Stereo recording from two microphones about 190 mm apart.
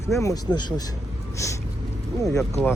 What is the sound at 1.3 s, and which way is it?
Vehicle, 15° left (ahead or behind).